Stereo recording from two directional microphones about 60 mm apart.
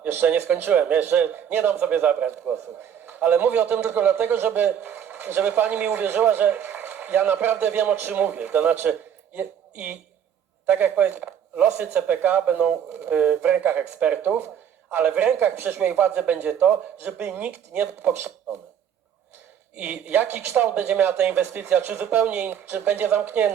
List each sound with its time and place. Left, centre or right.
0.1 s a man's voice: right
9.3 s a sound: right
10.7 s speech: right
19.7 s speech: right